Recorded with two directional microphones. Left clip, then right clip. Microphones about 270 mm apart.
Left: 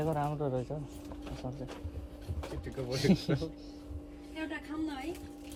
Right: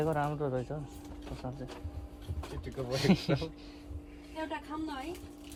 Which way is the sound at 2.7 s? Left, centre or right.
Centre.